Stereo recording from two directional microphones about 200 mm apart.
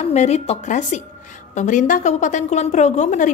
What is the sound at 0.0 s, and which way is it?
A woman's voice, 35° left (ahead or behind).